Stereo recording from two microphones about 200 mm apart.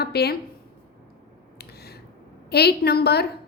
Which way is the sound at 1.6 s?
55° left (ahead or behind).